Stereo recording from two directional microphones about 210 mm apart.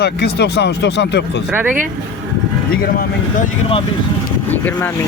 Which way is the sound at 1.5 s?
10° right (ahead or behind).